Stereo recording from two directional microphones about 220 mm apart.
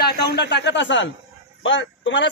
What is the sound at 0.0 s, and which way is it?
A man's voice, 50° left (ahead or behind).